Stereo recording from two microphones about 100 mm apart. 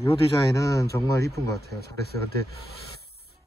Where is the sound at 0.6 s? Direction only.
30° left (ahead or behind).